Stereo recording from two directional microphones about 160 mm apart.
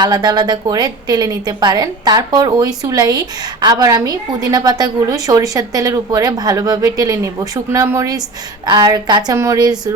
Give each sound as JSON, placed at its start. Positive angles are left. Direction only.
{"t": 0.0, "sound": "a woman's voice", "side_deg": -25}